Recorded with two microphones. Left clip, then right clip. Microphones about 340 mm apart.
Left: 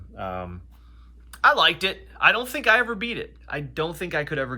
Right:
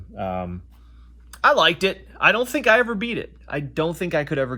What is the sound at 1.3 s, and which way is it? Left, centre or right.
Speech, left.